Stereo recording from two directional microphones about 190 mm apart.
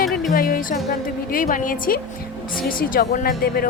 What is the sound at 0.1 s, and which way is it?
Speech, 50° left (ahead or behind).